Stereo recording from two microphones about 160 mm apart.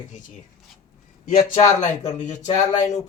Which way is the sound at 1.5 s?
50° left (ahead or behind).